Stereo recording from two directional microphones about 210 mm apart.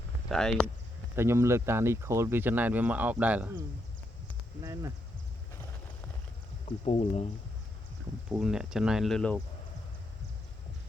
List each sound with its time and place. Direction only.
0.3 s speech: centre (ahead or behind)
1.1 s speech: 10° right (ahead or behind)
4.6 s speech: 15° right (ahead or behind)
6.7 s speech: 30° left (ahead or behind)
8.3 s speech: 5° right (ahead or behind)